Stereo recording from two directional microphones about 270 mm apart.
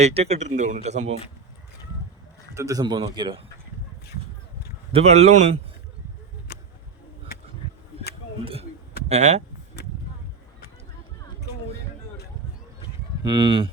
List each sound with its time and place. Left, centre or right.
0.0 s speech: right
2.6 s speech: centre
4.9 s speech: right
6.5 s a sound: left
9.0 s speech: right
13.2 s speech: centre